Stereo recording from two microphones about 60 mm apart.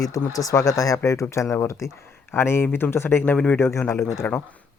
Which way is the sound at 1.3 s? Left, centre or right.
Left.